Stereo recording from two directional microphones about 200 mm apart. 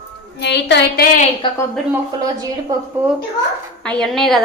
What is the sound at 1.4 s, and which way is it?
Speech, 25° left (ahead or behind).